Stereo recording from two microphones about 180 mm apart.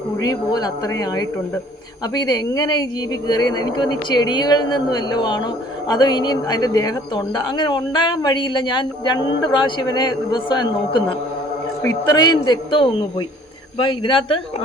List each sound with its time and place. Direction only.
0.2 s a woman's voice: 20° left (ahead or behind)